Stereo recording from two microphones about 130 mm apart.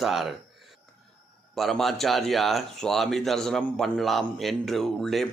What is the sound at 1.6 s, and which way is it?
Speech, centre (ahead or behind).